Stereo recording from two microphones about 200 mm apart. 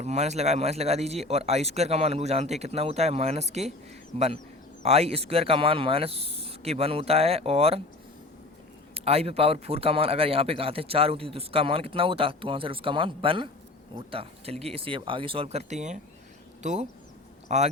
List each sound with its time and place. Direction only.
0.0 s speech: 35° right (ahead or behind)
4.8 s a man's voice: 30° right (ahead or behind)
9.0 s a man's voice: 30° right (ahead or behind)